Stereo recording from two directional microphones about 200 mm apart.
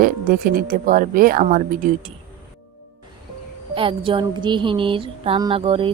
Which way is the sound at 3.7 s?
25° right (ahead or behind).